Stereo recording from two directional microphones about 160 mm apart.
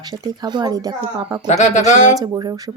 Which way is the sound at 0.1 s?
25° right (ahead or behind).